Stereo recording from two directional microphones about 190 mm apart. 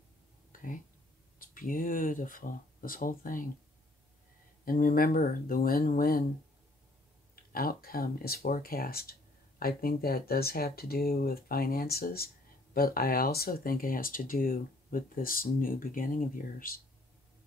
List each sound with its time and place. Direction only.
0.5 s a sound: 45° left (ahead or behind)
1.4 s speech: 45° left (ahead or behind)
4.6 s speech: 45° left (ahead or behind)
7.5 s speech: 50° left (ahead or behind)